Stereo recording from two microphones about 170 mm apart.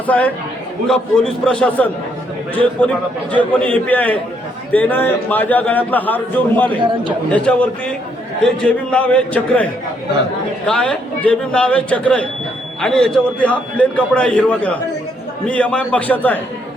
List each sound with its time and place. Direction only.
0.1 s a man's voice: 10° left (ahead or behind)
3.3 s a man's voice: 10° left (ahead or behind)
6.7 s a man's voice: 30° right (ahead or behind)
7.3 s a man's voice: 5° left (ahead or behind)
10.7 s a man's voice: 5° left (ahead or behind)